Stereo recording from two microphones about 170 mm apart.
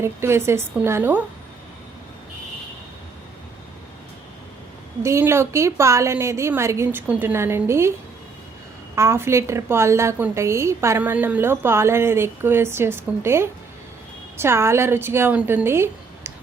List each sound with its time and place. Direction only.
0.0 s a woman's voice: 15° right (ahead or behind)
5.0 s a woman's voice: 15° right (ahead or behind)
9.0 s a woman's voice: 15° right (ahead or behind)